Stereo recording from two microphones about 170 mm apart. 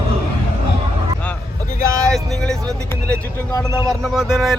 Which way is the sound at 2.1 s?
5° left (ahead or behind).